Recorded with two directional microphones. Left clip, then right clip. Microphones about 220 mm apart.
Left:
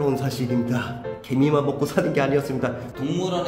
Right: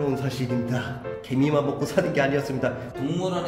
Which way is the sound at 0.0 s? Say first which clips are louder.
Left 3 dB; 20° left (ahead or behind).